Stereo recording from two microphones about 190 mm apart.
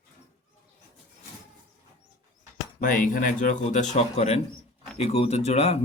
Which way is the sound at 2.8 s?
45° left (ahead or behind).